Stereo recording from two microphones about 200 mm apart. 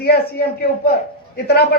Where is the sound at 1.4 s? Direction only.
55° left (ahead or behind).